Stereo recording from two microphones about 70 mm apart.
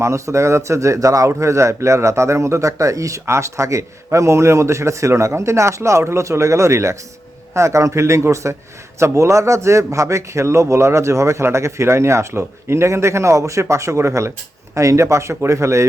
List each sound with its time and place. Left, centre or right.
0.0 s a man's voice: right